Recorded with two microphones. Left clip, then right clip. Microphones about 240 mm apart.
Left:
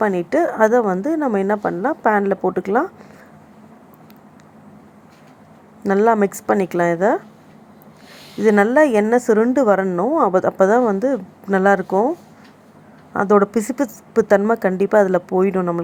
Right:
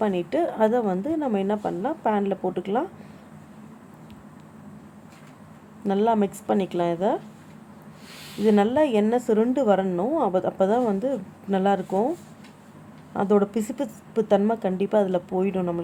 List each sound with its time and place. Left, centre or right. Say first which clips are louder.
0.0 s a woman's voice: left 7 dB; centre
5.9 s a woman's voice: left 7 dB; centre
8.4 s a woman's voice: left 7 dB; centre
13.1 s a woman's voice: left 7 dB; centre